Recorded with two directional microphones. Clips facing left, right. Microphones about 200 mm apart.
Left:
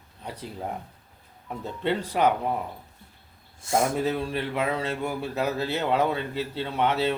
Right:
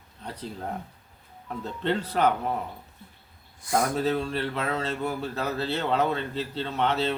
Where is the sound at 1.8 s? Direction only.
10° left (ahead or behind).